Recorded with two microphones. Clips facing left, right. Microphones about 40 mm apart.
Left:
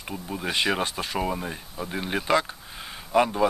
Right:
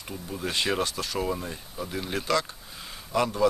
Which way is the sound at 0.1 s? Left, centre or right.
Left.